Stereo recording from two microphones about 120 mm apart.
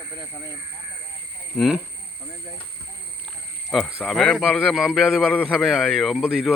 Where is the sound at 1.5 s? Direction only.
Centre (ahead or behind).